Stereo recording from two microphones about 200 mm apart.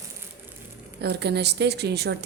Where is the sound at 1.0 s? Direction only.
55° right (ahead or behind).